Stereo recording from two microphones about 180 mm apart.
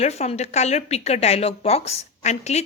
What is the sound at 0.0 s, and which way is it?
A woman's voice, 35° left (ahead or behind).